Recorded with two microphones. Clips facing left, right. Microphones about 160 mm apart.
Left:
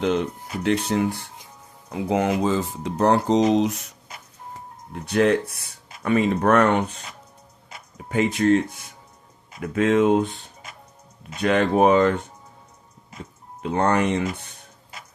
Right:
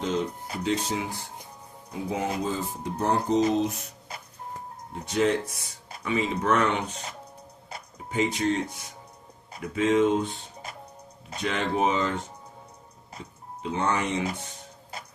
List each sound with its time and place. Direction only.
0.0 s speech: 70° left (ahead or behind)
1.9 s speech: 80° left
5.0 s speech: 65° left (ahead or behind)
8.1 s speech: 55° left (ahead or behind)
9.7 s speech: 55° left (ahead or behind)
11.3 s speech: 60° left (ahead or behind)
13.6 s speech: 55° left (ahead or behind)